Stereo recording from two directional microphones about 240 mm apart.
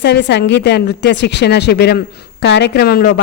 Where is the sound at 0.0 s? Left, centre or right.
Left.